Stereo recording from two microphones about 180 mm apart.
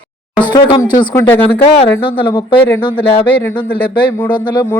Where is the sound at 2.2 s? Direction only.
25° left (ahead or behind).